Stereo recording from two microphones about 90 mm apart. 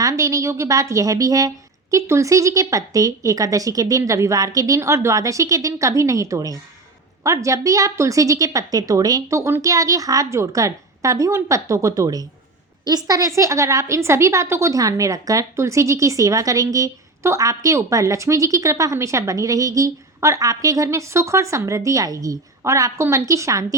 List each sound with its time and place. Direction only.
0.0 s a woman's voice: 35° right (ahead or behind)